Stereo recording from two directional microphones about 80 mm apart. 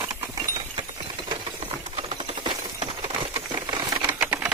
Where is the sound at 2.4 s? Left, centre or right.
Right.